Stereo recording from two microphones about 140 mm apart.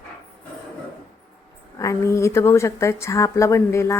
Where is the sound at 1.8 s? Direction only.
20° left (ahead or behind).